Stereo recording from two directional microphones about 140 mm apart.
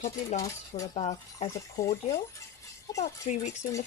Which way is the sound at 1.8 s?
25° left (ahead or behind).